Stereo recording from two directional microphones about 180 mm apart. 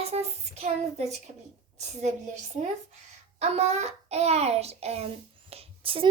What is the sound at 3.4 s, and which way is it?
A child's voice, 35° right (ahead or behind).